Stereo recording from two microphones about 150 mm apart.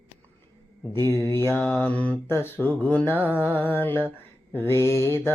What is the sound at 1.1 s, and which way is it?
Mantra, 15° left (ahead or behind).